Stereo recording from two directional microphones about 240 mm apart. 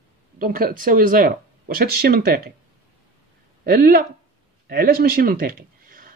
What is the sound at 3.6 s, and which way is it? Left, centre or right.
Speech, right.